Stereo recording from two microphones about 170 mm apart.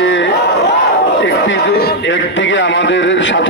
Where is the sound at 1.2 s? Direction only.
80° left.